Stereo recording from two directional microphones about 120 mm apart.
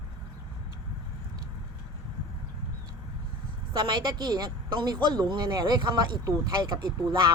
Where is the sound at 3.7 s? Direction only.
40° right (ahead or behind).